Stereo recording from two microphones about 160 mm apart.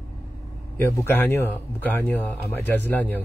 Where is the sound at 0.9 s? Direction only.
15° left (ahead or behind).